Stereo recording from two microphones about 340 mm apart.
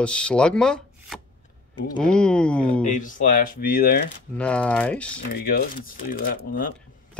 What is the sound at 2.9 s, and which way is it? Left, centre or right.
Speech, left.